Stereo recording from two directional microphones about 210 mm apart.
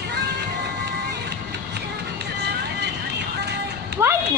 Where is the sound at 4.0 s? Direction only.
10° right (ahead or behind).